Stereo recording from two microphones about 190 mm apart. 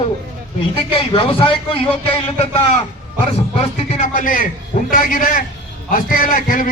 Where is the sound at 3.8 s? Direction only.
40° left (ahead or behind).